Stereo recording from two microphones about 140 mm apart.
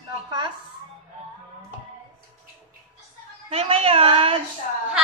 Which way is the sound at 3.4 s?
45° right (ahead or behind).